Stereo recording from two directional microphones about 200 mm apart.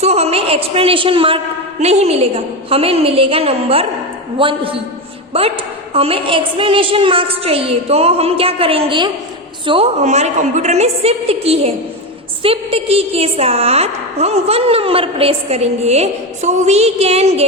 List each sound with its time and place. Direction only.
0.0 s a woman's voice: 30° right (ahead or behind)